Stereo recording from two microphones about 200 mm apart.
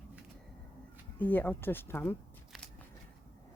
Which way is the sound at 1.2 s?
10° left (ahead or behind).